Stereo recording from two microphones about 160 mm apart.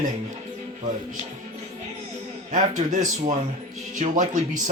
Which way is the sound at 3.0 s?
50° right (ahead or behind).